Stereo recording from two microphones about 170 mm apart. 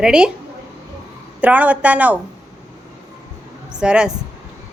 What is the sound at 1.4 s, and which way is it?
Speech, 10° right (ahead or behind).